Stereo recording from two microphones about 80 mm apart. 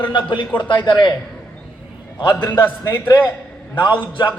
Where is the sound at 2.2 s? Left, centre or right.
Centre.